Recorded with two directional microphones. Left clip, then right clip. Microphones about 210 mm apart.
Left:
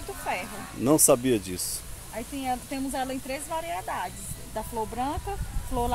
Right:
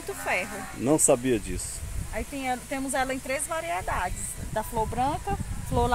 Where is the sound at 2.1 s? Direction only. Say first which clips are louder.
Right 1 dB; 35° right (ahead or behind).